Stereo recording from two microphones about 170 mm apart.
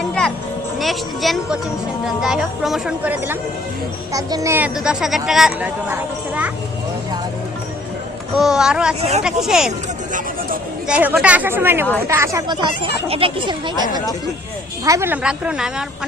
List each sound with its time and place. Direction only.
0.1 s music: 5° left (ahead or behind)
0.8 s speech: centre (ahead or behind)
4.1 s speech: 20° right (ahead or behind)
8.4 s speech: 5° right (ahead or behind)
10.1 s a sound: 50° right (ahead or behind)
10.8 s speech: 10° right (ahead or behind); by 13.8 s 30° right (ahead or behind)
14.8 s speech: 15° right (ahead or behind)